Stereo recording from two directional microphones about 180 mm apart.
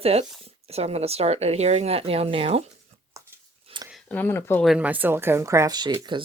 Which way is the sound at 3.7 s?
30° right (ahead or behind).